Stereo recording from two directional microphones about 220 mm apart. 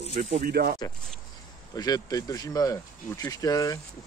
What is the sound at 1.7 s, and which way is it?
Speech, 15° left (ahead or behind).